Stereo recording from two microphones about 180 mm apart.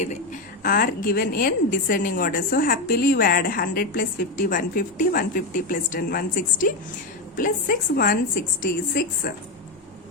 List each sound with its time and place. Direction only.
0.6 s a woman's voice: 50° left (ahead or behind)